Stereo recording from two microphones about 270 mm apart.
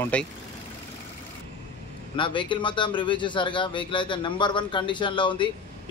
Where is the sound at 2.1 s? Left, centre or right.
Centre.